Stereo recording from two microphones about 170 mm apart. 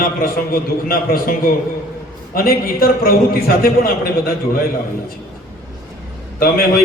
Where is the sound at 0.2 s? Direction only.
60° left (ahead or behind).